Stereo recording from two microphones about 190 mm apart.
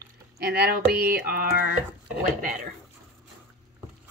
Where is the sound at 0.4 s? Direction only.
60° right (ahead or behind).